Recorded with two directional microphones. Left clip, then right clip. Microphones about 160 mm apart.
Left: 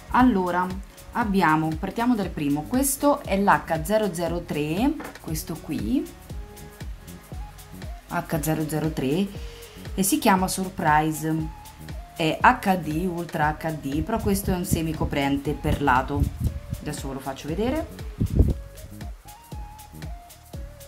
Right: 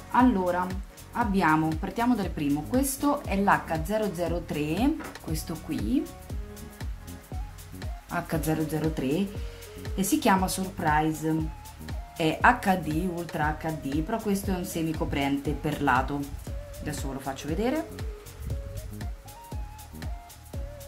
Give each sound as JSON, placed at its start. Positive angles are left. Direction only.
{"t": 0.1, "sound": "speech", "side_deg": 20}
{"t": 3.4, "sound": "speech", "side_deg": 5}
{"t": 3.9, "sound": "speech", "side_deg": 15}
{"t": 4.6, "sound": "speech", "side_deg": 5}
{"t": 7.8, "sound": "a woman's voice", "side_deg": 5}
{"t": 13.4, "sound": "speech", "side_deg": 15}
{"t": 15.7, "sound": "speech", "side_deg": 5}